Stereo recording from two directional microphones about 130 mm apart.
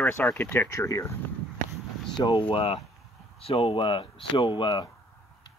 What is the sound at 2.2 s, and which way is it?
Speech, 40° left (ahead or behind).